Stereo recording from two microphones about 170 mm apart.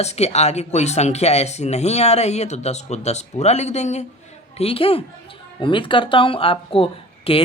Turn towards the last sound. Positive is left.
turn(degrees=35)  # may be behind; listen again after turning